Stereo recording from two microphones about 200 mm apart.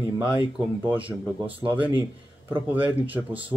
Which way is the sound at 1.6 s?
15° right (ahead or behind).